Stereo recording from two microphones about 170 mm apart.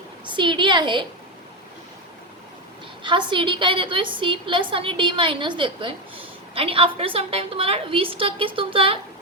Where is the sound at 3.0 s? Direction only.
30° right (ahead or behind).